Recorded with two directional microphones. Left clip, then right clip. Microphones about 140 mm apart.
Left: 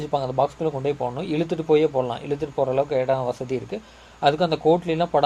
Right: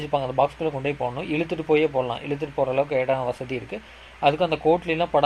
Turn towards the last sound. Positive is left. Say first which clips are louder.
# left 1 dB
turn(degrees=20)  # may be behind; listen again after turning